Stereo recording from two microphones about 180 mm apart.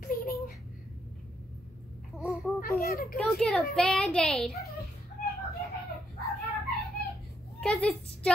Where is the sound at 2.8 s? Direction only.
55° left (ahead or behind).